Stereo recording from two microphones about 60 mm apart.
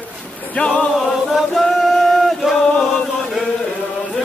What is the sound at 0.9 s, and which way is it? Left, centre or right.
Chant, centre.